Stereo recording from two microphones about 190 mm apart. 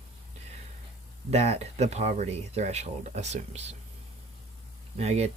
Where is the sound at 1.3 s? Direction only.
30° right (ahead or behind).